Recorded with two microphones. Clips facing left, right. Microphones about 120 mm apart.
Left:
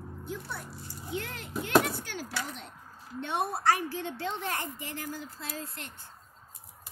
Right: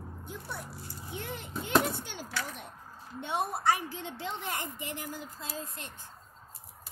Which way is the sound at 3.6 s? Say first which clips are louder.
Left 2 dB; 15° right (ahead or behind).